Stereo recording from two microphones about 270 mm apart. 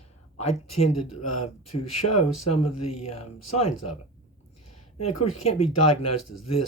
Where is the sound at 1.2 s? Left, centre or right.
Left.